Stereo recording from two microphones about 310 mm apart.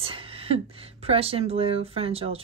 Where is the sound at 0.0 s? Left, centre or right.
Centre.